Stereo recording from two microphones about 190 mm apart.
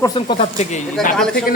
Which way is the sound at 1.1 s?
5° left (ahead or behind).